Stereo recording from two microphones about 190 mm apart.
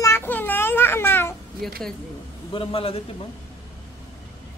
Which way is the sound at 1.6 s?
Centre (ahead or behind).